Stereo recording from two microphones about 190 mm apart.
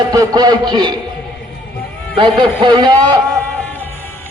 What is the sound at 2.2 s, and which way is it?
A man's voice, 25° right (ahead or behind).